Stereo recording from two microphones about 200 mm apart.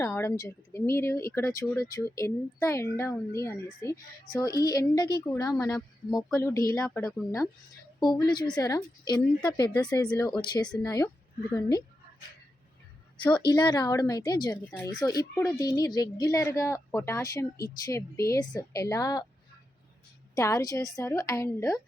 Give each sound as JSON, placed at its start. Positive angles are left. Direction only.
{"t": 0.0, "sound": "speech", "side_deg": 10}
{"t": 8.0, "sound": "a woman's voice", "side_deg": 20}
{"t": 13.5, "sound": "a woman's voice", "side_deg": 20}
{"t": 20.3, "sound": "speech", "side_deg": 15}